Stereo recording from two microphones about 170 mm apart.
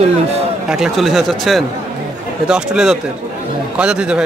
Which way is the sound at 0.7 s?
5° right (ahead or behind).